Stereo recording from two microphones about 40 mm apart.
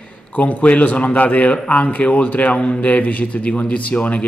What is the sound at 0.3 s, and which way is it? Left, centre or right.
Speech, left.